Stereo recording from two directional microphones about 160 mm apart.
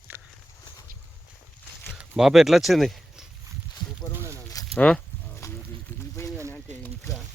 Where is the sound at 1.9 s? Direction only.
5° right (ahead or behind).